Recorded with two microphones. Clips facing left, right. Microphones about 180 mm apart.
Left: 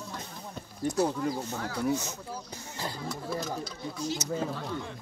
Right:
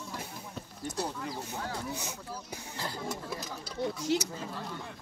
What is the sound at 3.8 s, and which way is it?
Speech, 70° right (ahead or behind).